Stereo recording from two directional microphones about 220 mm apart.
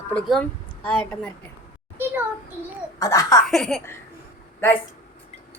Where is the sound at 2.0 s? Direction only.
10° right (ahead or behind).